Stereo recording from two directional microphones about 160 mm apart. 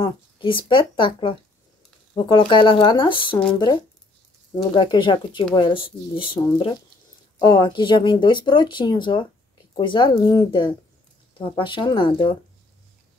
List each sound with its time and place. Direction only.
0.0 s speech: 30° left (ahead or behind)